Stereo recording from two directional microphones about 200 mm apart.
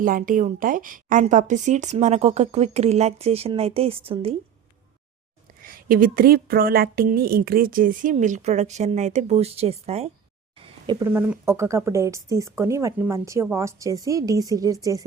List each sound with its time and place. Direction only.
0.0 s a woman's voice: 45° right (ahead or behind)
5.6 s speech: 45° right (ahead or behind)
11.0 s speech: 10° right (ahead or behind)